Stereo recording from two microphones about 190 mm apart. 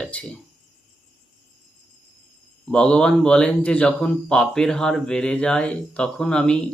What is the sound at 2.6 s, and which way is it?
Speech, 5° left (ahead or behind).